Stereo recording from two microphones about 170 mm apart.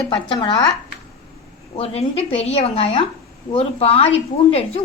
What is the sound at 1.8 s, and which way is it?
A woman's voice, 35° left (ahead or behind).